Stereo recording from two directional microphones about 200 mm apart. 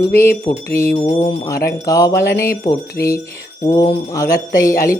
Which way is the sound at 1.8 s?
15° left (ahead or behind).